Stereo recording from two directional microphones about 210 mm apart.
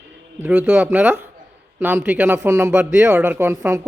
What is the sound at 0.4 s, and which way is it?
Speech, 10° right (ahead or behind).